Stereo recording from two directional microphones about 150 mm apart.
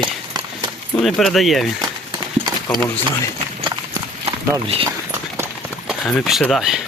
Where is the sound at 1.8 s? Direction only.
30° right (ahead or behind).